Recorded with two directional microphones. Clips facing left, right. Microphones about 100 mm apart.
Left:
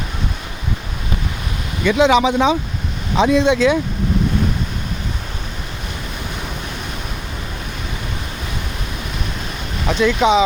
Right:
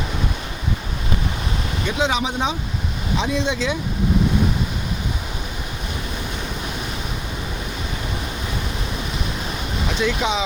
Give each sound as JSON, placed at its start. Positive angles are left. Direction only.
{"t": 1.8, "sound": "speech", "side_deg": 85}
{"t": 3.2, "sound": "speech", "side_deg": 60}
{"t": 10.0, "sound": "speech", "side_deg": 60}